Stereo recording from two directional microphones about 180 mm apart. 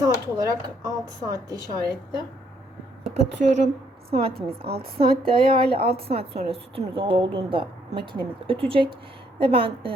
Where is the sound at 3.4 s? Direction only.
45° right (ahead or behind).